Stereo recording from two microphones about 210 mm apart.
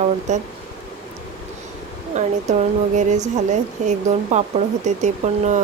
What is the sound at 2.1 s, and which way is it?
Speech, 35° right (ahead or behind).